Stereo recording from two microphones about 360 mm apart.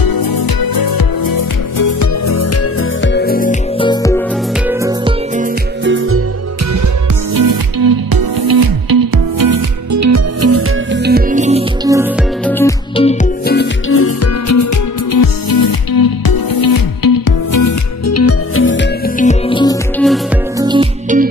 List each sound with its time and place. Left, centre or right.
0.0 s music: left
3.0 s music: left
3.9 s music: centre
4.6 s music: centre
5.9 s music: right
7.3 s music: right
11.1 s music: right
12.4 s music: centre; by 14.7 s left
15.1 s music: left; by 20.2 s centre
20.5 s music: centre